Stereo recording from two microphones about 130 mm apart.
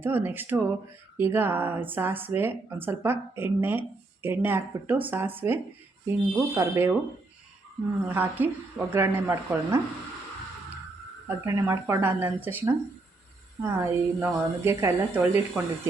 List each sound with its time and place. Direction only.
0.0 s speech: 15° right (ahead or behind)
8.0 s speech: 15° right (ahead or behind)
11.3 s speech: 25° right (ahead or behind)